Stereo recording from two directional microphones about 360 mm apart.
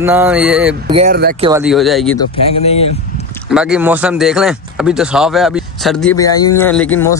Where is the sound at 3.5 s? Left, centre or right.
Centre.